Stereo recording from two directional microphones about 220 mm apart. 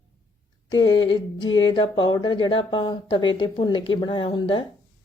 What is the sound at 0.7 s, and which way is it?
Speech, 20° left (ahead or behind).